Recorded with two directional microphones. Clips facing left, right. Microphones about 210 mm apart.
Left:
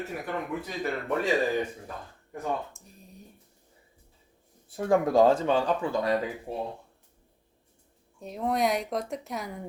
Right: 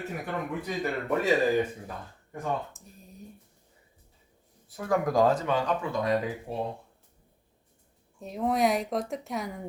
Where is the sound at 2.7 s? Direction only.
Centre (ahead or behind).